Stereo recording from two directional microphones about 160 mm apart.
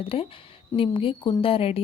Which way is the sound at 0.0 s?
35° left (ahead or behind).